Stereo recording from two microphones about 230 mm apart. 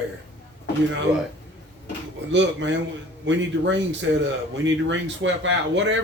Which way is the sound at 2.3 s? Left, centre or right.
Right.